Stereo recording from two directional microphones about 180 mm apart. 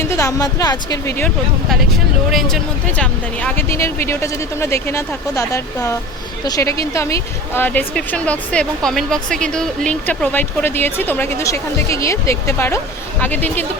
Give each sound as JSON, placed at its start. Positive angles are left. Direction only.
{"t": 0.2, "sound": "speech", "side_deg": 20}
{"t": 3.0, "sound": "a woman's voice", "side_deg": 10}